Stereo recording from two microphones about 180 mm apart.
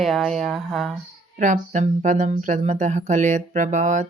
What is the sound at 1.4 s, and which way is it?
Speech, 45° right (ahead or behind).